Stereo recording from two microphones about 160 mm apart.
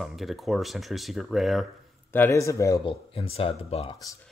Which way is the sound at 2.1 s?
15° left (ahead or behind).